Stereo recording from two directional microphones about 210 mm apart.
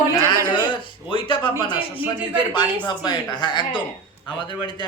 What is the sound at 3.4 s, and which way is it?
Speech, 20° left (ahead or behind).